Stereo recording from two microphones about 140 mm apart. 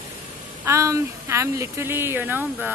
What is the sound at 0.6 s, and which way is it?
Speech, 20° right (ahead or behind).